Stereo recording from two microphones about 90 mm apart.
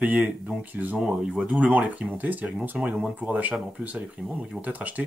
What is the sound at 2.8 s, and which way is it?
Speech, 10° right (ahead or behind).